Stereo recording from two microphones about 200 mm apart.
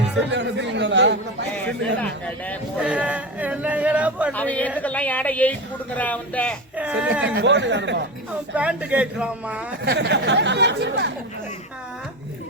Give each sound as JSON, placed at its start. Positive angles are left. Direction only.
{"t": 0.3, "sound": "speech", "side_deg": -60}
{"t": 2.0, "sound": "speech", "side_deg": 5}
{"t": 2.7, "sound": "speech", "side_deg": -5}
{"t": 4.3, "sound": "speech", "side_deg": 5}
{"t": 6.7, "sound": "speech", "side_deg": -5}
{"t": 7.3, "sound": "speech", "side_deg": -60}
{"t": 8.5, "sound": "speech", "side_deg": -5}
{"t": 9.8, "sound": "speech", "side_deg": -60}